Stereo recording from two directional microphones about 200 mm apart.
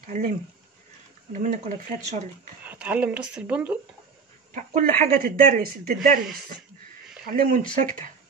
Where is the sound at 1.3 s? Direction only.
40° right (ahead or behind).